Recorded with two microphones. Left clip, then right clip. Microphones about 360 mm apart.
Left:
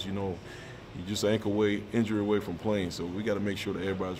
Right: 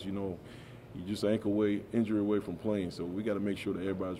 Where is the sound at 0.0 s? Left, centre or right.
Right.